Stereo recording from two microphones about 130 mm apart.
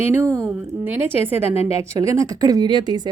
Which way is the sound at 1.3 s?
50° left (ahead or behind).